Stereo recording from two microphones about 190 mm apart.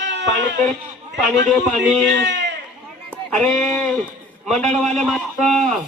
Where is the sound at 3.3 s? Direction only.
5° left (ahead or behind).